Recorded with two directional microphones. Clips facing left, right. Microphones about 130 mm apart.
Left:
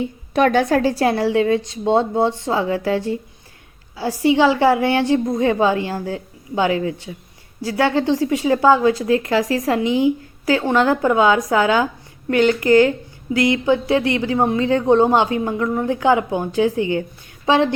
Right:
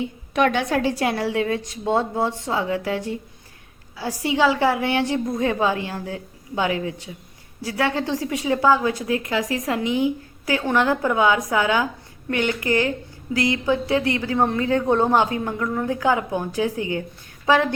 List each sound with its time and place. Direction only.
0.0 s a woman's voice: 40° left (ahead or behind)